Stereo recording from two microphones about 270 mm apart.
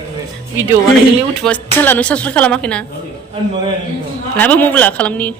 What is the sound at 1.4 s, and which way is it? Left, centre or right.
Speech, centre.